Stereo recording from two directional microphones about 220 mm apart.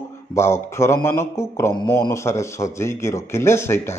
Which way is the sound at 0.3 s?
10° left (ahead or behind).